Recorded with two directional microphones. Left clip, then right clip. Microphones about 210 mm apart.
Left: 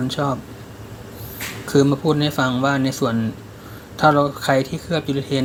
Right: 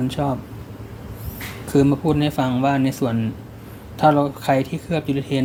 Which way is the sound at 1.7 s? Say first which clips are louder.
Left 1 dB; 5° left (ahead or behind).